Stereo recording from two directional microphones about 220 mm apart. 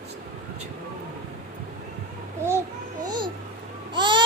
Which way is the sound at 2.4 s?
10° right (ahead or behind).